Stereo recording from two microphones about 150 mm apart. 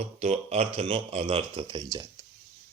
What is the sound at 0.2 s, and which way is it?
Speech, 45° right (ahead or behind).